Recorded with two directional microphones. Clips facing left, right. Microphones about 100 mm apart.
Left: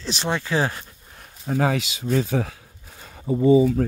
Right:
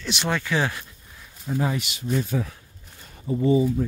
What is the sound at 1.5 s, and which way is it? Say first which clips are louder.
Speech: left 4 dB; 80° left.